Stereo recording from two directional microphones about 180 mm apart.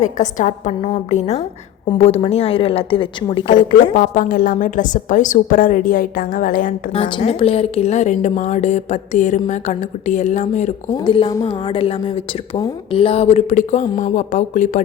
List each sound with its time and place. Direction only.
0.2 s a woman's voice: 40° left (ahead or behind)
3.9 s a woman's voice: 45° left (ahead or behind)
6.9 s a woman's voice: 30° left (ahead or behind)
10.9 s a woman's voice: 25° left (ahead or behind); by 14.8 s 45° left (ahead or behind)